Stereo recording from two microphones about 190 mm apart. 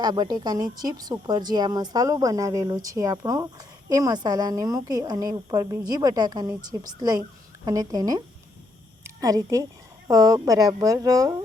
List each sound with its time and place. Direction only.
0.0 s a woman's voice: 20° right (ahead or behind)